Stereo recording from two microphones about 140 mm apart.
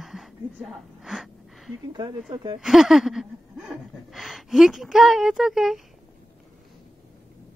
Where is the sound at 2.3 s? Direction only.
35° right (ahead or behind).